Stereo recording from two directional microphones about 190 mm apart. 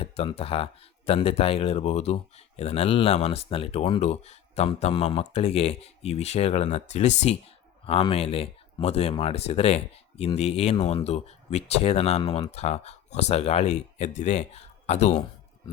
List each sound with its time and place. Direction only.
0.0 s speech: 30° left (ahead or behind)